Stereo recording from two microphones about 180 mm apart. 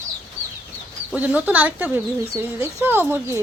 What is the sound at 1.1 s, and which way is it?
Speech, 10° right (ahead or behind).